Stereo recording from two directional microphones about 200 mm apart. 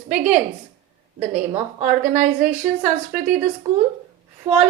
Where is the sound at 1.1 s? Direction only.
35° right (ahead or behind).